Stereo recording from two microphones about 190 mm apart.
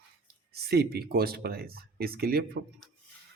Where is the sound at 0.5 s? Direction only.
55° right (ahead or behind).